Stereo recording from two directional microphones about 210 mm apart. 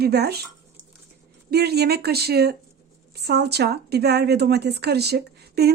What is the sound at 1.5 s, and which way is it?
A woman's voice, 50° right (ahead or behind).